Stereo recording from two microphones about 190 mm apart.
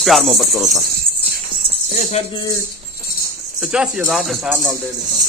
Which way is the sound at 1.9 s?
35° left (ahead or behind).